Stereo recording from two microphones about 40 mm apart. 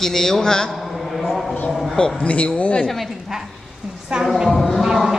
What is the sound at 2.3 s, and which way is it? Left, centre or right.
Speech, left.